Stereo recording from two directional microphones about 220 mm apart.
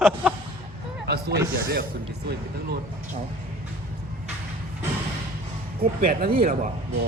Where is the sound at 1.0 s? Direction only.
50° right (ahead or behind).